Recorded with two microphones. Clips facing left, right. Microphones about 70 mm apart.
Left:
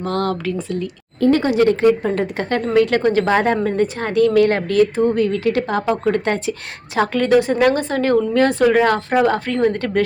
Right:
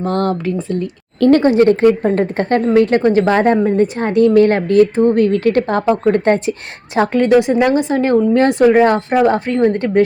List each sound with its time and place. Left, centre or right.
0.0 s speech: right